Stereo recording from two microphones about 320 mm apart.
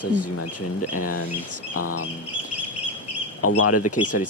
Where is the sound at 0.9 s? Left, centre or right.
Left.